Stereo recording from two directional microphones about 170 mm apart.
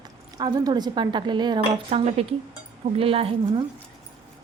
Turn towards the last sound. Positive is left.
turn(degrees=-35)  # may be behind; listen again after turning